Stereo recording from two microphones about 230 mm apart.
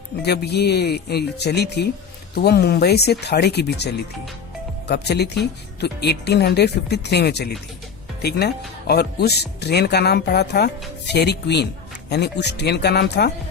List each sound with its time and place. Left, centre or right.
0.2 s speech: left
4.9 s speech: left